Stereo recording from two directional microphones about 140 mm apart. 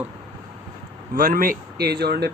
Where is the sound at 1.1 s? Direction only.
85° right.